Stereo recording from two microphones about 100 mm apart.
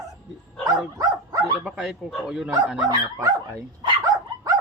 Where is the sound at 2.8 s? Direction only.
45° right (ahead or behind).